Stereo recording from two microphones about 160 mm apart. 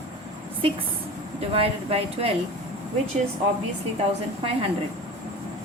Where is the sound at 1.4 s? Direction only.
35° right (ahead or behind).